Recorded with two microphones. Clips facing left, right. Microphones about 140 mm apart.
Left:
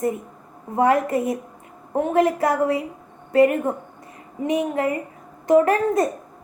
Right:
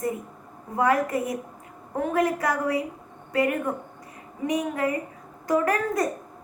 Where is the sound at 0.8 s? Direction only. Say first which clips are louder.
Left 4 dB; 25° left (ahead or behind).